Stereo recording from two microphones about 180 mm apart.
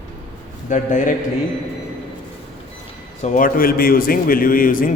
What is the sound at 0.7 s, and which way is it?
Speech, 45° left (ahead or behind).